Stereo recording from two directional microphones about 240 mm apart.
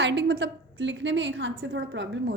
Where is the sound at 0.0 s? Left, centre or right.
Right.